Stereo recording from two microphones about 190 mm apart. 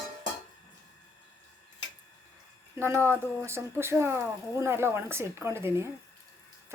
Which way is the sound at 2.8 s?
10° right (ahead or behind).